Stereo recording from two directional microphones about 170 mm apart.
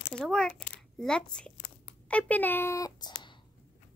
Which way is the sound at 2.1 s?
10° left (ahead or behind).